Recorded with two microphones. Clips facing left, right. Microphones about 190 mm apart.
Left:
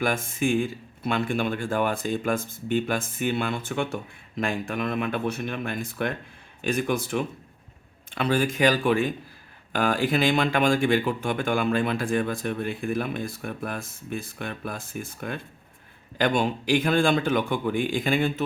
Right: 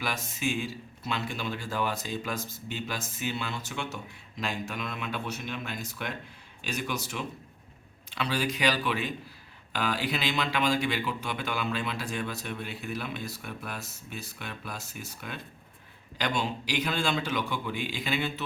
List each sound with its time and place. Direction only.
0.0 s speech: 50° left (ahead or behind)